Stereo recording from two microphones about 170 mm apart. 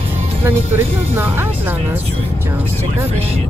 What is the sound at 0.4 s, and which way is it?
Speech, 15° right (ahead or behind).